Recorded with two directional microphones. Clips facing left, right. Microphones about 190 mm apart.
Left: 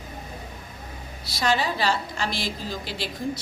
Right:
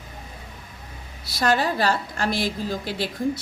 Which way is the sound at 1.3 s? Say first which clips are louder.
Right 3 dB; 55° right (ahead or behind).